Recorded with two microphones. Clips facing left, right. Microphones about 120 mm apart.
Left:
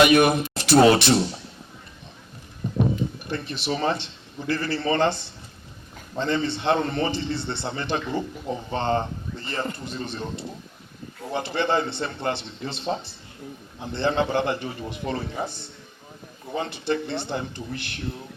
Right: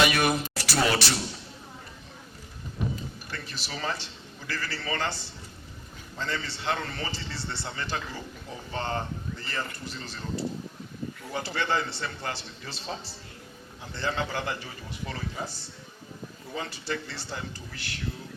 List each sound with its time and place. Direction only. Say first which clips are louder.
0.1 s a man's voice: left 8 dB; 20° left (ahead or behind)
2.6 s a sound: left 13 dB; 25° left (ahead or behind)
3.2 s a man's voice: left 11 dB; 20° left (ahead or behind)